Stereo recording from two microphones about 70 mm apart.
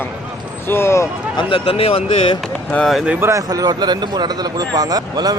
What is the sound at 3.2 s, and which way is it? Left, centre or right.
Speech, right.